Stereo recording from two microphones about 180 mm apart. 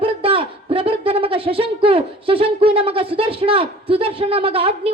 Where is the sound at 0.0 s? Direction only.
30° right (ahead or behind).